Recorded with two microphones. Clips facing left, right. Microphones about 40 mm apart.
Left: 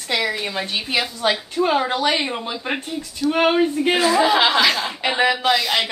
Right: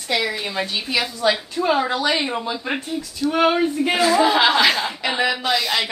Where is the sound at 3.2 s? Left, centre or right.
Left.